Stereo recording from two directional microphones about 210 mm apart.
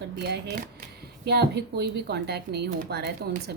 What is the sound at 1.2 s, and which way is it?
Speech, 50° right (ahead or behind).